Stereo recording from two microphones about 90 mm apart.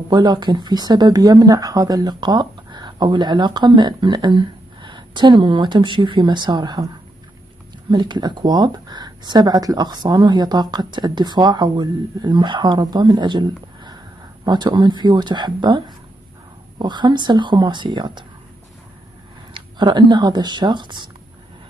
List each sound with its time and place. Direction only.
0.1 s speech: 50° right (ahead or behind)
7.9 s speech: 55° right (ahead or behind)
19.5 s speech: 55° right (ahead or behind)